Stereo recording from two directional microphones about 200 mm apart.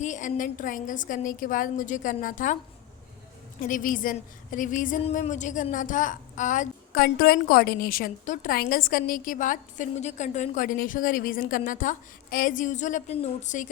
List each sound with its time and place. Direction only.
0.0 s a woman's voice: 40° left (ahead or behind)
3.6 s a woman's voice: 40° left (ahead or behind)